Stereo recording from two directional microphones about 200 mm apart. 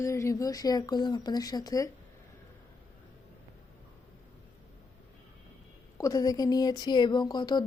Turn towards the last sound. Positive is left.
turn(degrees=20)  # may be behind; listen again after turning